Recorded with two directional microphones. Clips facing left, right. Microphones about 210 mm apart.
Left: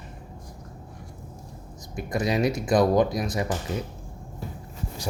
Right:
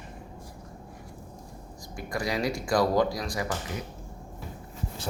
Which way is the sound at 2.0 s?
20° left (ahead or behind).